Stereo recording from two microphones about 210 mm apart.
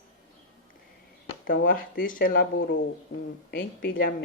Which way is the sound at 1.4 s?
45° left (ahead or behind).